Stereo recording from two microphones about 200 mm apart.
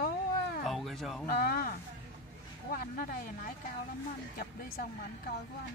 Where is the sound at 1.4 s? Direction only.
45° left (ahead or behind).